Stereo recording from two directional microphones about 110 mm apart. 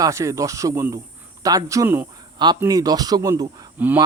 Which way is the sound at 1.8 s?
15° right (ahead or behind).